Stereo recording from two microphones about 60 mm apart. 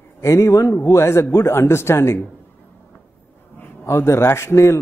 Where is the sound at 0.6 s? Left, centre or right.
Left.